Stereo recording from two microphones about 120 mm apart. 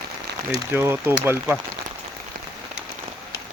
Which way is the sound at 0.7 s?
20° right (ahead or behind).